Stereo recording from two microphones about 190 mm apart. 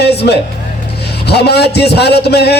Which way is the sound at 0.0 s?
60° left (ahead or behind).